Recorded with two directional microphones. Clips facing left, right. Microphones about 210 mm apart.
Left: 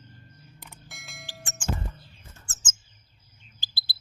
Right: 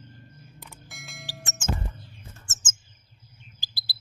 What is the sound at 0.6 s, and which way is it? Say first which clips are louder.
Bell: right 2 dB; centre (ahead or behind).